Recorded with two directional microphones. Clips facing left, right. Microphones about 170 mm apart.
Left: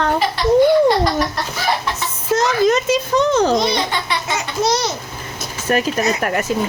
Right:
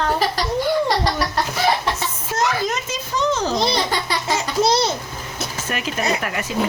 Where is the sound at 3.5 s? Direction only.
35° right (ahead or behind).